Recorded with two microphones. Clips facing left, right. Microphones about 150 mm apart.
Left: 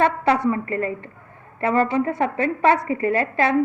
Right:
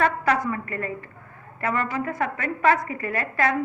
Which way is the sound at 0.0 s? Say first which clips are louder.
Left 4 dB; 30° left (ahead or behind).